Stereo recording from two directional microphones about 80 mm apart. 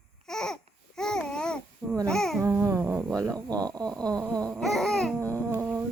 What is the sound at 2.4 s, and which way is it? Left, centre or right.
Humming, right.